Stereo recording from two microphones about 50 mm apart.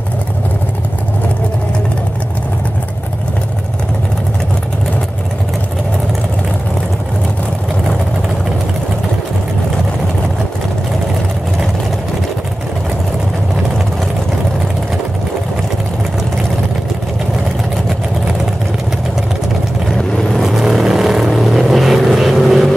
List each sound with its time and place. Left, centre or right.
19.9 s vehicle: centre
20.4 s vehicle: centre